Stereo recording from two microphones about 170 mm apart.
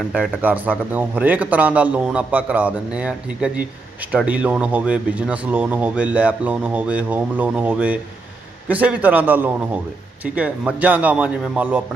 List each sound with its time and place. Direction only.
0.1 s speech: 10° right (ahead or behind)